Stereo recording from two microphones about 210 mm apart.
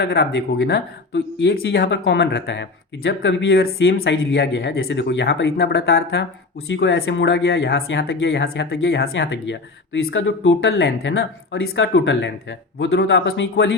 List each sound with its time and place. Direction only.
0.0 s speech: 55° left (ahead or behind)
7.8 s speech: 70° left (ahead or behind)